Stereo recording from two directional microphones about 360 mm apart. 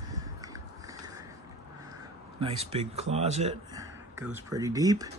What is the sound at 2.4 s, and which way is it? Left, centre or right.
A man's voice, centre.